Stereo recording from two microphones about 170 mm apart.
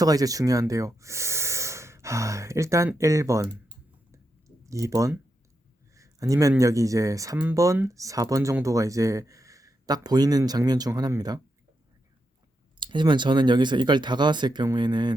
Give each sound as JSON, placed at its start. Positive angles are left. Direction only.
{"t": 0.0, "sound": "speech", "side_deg": -20}
{"t": 4.1, "sound": "a sound", "side_deg": -20}
{"t": 5.9, "sound": "speech", "side_deg": -20}
{"t": 12.8, "sound": "speech", "side_deg": -30}